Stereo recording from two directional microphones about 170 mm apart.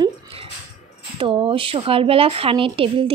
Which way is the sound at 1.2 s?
30° right (ahead or behind).